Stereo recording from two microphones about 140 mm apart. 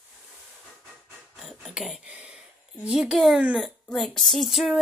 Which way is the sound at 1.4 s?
Centre (ahead or behind).